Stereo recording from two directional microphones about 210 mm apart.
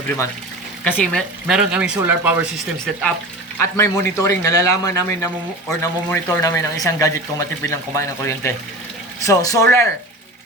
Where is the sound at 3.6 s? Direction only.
15° left (ahead or behind).